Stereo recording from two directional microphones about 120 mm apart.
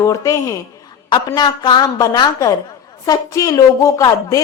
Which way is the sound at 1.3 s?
40° left (ahead or behind).